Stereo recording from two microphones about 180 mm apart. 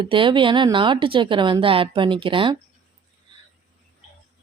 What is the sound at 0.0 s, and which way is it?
Speech, 30° right (ahead or behind).